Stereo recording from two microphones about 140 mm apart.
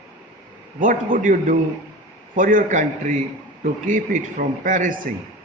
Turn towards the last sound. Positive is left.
turn(degrees=-70)  # may be behind; listen again after turning